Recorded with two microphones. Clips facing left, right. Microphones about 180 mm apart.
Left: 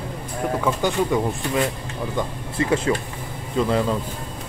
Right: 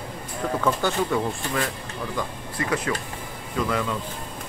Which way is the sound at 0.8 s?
15° left (ahead or behind).